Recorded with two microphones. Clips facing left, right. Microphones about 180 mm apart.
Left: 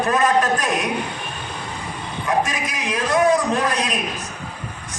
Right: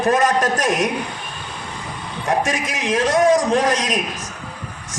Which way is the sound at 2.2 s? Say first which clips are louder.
Right 1 dB; 45° right (ahead or behind).